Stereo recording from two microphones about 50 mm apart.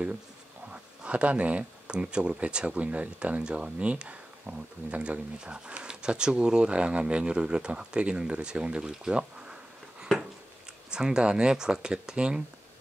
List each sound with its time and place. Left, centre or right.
0.7 s speech: right